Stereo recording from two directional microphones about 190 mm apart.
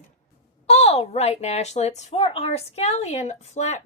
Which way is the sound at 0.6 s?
35° left (ahead or behind).